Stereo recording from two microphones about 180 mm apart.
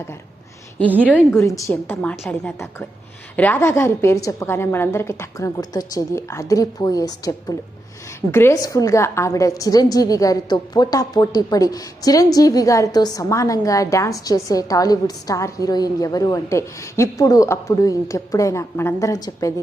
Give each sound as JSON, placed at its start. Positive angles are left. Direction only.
{"t": 0.9, "sound": "a woman's voice", "side_deg": -10}
{"t": 1.3, "sound": "a woman's voice", "side_deg": 15}
{"t": 3.3, "sound": "a woman's voice", "side_deg": 10}